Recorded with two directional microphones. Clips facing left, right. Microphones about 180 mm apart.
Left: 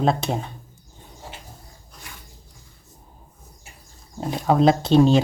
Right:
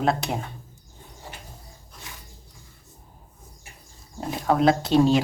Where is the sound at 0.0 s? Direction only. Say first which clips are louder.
Left 3 dB; 20° left (ahead or behind).